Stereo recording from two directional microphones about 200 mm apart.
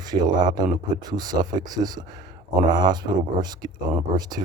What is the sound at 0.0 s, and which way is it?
Speech, 20° right (ahead or behind).